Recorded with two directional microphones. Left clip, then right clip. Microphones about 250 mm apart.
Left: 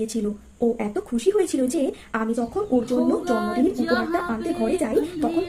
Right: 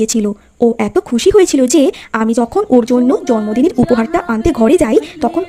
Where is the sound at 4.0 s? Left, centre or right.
Right.